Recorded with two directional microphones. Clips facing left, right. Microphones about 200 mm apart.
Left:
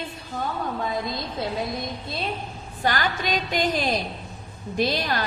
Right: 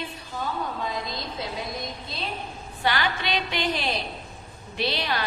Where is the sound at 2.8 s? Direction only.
45° left (ahead or behind).